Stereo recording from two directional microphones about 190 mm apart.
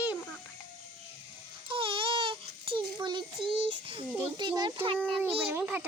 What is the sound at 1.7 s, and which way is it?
Baby cry, 25° right (ahead or behind).